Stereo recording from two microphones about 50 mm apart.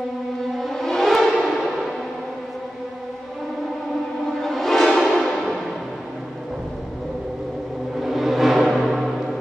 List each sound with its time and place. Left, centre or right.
0.6 s music: centre
4.4 s music: centre
8.0 s music: centre